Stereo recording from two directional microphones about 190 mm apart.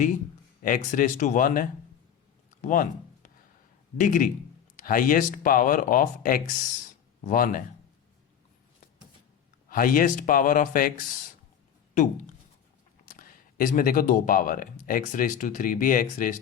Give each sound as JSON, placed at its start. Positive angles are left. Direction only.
{"t": 0.6, "sound": "speech", "side_deg": 45}
{"t": 3.9, "sound": "speech", "side_deg": 45}
{"t": 9.6, "sound": "speech", "side_deg": 45}
{"t": 13.1, "sound": "speech", "side_deg": 45}